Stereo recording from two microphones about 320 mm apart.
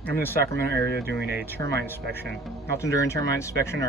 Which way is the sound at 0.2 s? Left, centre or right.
Centre.